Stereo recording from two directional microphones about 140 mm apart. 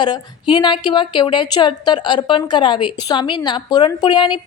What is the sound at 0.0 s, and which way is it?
A woman's voice, 35° left (ahead or behind).